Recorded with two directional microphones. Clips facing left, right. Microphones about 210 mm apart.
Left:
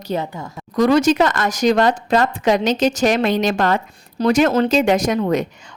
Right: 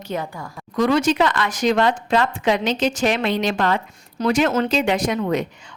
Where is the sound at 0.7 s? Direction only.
40° left (ahead or behind).